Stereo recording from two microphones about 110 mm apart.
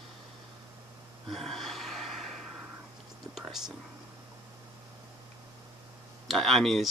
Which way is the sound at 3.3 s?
5° right (ahead or behind).